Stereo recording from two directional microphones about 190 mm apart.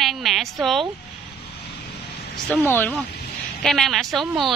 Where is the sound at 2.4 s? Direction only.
10° left (ahead or behind).